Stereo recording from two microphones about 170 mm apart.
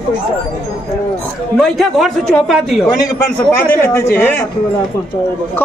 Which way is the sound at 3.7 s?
15° left (ahead or behind).